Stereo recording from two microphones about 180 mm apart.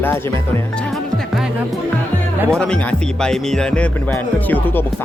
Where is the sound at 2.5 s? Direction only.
5° left (ahead or behind).